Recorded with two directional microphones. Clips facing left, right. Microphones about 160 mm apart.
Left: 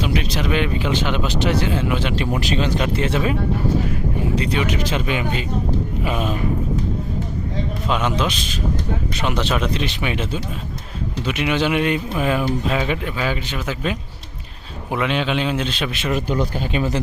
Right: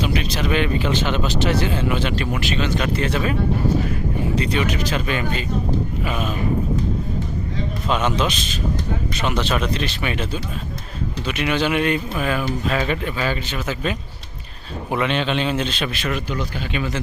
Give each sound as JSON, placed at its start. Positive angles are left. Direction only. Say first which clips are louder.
{"t": 0.3, "sound": "speech", "louder": "even", "side_deg": 10}
{"t": 2.5, "sound": "speech", "louder": "left 2 dB", "side_deg": 35}
{"t": 2.8, "sound": "speech", "louder": "left 1 dB", "side_deg": 20}
{"t": 4.5, "sound": "speech", "louder": "even", "side_deg": 20}
{"t": 7.9, "sound": "speech", "louder": "right 1 dB", "side_deg": 10}
{"t": 16.1, "sound": "speech", "louder": "left 4 dB", "side_deg": 40}